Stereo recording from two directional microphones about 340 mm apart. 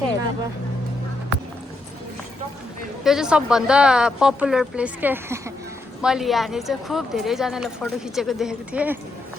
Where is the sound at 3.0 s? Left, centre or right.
Centre.